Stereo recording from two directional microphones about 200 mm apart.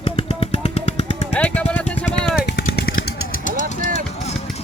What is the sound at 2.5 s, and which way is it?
Jackhammer, 55° left (ahead or behind).